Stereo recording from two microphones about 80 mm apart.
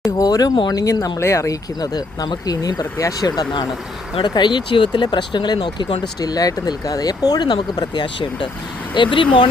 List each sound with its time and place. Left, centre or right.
0.2 s speech: left
4.2 s speech: left
6.1 s speech: left